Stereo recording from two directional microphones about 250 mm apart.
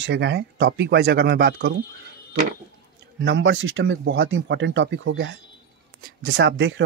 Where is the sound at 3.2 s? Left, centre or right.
Right.